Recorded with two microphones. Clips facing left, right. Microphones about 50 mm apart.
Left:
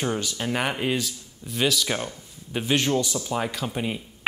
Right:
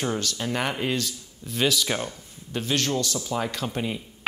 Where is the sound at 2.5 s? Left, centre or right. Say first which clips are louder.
Left 3 dB; centre.